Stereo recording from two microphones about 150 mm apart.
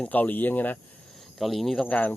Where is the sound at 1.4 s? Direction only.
Centre (ahead or behind).